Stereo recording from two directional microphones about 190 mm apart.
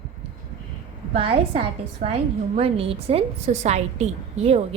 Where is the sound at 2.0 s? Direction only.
45° right (ahead or behind).